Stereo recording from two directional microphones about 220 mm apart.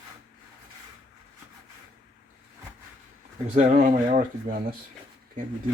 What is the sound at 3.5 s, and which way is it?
Speech, 35° right (ahead or behind).